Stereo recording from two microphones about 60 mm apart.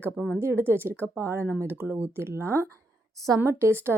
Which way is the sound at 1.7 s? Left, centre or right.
Right.